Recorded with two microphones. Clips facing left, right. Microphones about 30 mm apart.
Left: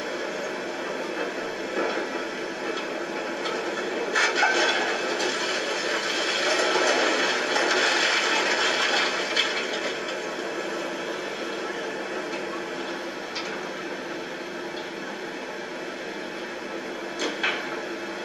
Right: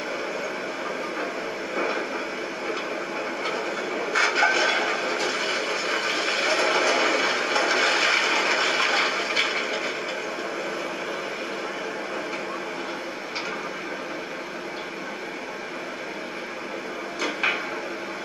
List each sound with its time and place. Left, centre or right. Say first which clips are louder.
1.8 s vehicle: even; right
4.4 s a sound: right 1 dB; right
9.4 s vehicle: right 1 dB; right